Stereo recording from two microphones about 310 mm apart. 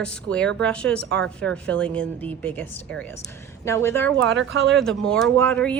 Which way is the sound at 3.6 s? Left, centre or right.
Centre.